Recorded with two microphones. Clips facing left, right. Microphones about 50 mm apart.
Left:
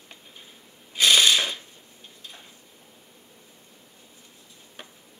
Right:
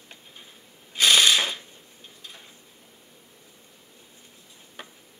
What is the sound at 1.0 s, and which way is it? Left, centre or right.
Mechanisms, centre.